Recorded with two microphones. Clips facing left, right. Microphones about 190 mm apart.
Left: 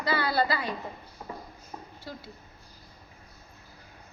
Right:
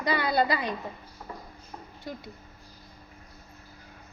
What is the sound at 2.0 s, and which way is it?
Speech, 20° right (ahead or behind).